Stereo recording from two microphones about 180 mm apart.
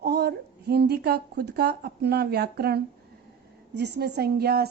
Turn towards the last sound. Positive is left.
turn(degrees=-60)  # may be behind; listen again after turning